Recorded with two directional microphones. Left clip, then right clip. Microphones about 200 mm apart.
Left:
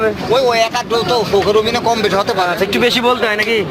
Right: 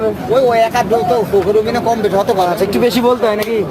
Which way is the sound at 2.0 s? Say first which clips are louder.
Right 1 dB; 25° right (ahead or behind).